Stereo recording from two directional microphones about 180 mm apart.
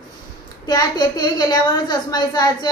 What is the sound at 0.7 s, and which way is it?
A woman's voice, 20° left (ahead or behind).